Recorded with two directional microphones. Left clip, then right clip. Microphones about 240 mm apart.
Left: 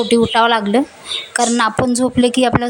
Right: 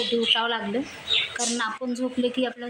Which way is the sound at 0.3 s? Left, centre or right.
Left.